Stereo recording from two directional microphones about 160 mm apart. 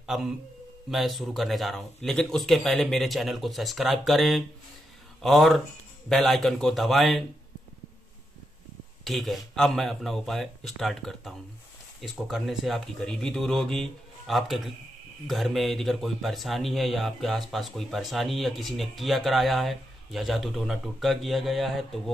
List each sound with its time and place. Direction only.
0.0 s a man's voice: 5° right (ahead or behind)
9.0 s a man's voice: centre (ahead or behind)